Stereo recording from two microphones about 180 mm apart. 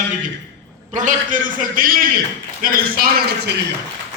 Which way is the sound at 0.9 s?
45° right (ahead or behind).